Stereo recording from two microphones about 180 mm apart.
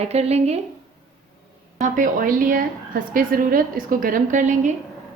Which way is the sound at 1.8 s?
45° right (ahead or behind).